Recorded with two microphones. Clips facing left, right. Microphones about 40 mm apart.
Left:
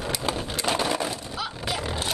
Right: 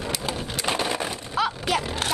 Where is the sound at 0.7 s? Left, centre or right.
Centre.